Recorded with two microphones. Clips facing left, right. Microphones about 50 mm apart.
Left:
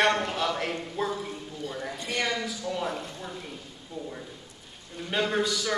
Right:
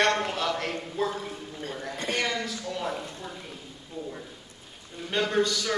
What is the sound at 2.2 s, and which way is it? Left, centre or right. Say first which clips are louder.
A man's voice: even; centre.